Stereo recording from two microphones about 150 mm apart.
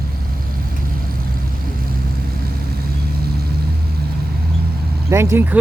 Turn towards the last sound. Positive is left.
turn(degrees=-15)  # may be behind; listen again after turning